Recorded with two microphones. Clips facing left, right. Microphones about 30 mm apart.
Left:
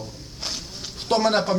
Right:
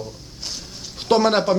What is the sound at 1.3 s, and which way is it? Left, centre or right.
Speech, centre.